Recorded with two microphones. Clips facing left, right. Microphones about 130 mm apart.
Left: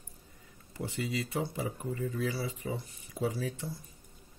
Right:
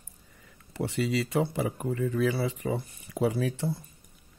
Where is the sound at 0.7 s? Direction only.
75° right (ahead or behind).